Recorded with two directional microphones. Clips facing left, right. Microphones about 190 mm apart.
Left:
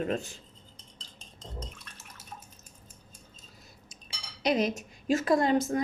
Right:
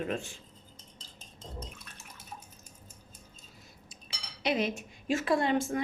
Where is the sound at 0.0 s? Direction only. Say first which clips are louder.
Left 3 dB; 40° left (ahead or behind).